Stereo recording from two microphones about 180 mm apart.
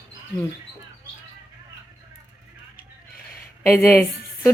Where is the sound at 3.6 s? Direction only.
15° left (ahead or behind).